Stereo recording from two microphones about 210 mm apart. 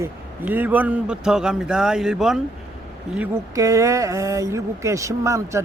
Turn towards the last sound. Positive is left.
turn(degrees=-15)  # may be behind; listen again after turning